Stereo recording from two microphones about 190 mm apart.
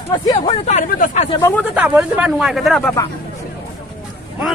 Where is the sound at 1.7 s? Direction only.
10° right (ahead or behind).